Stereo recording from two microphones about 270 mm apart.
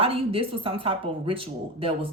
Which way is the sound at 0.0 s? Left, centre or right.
Right.